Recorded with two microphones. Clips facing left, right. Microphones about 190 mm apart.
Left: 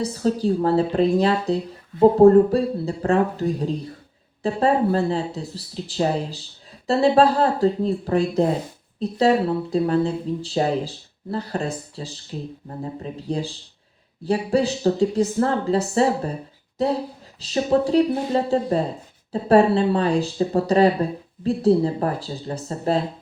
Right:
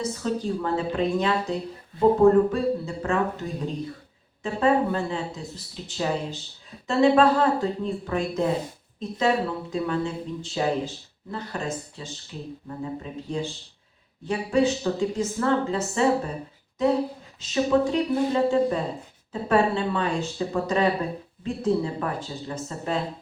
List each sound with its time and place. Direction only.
0.0 s speech: 35° left (ahead or behind)